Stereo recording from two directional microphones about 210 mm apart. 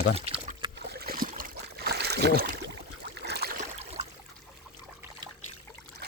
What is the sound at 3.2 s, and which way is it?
Boat, 50° right (ahead or behind).